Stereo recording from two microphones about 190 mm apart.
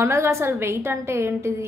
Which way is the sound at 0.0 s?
15° right (ahead or behind).